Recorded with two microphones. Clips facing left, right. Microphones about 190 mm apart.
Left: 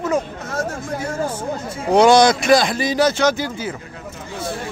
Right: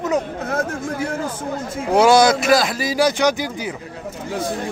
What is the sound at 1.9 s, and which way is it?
Speech, 5° right (ahead or behind).